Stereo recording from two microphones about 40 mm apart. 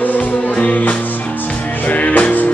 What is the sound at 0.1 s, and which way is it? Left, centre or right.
Music, left.